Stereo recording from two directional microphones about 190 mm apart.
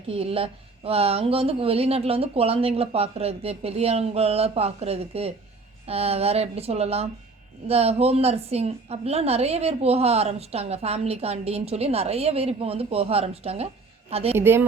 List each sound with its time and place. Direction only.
0.1 s a woman's voice: 30° right (ahead or behind)
14.3 s a woman's voice: 10° right (ahead or behind)